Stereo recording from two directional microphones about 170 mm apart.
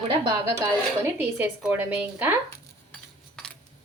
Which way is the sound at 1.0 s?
15° right (ahead or behind).